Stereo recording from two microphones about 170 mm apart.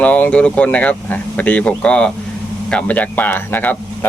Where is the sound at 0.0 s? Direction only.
5° left (ahead or behind).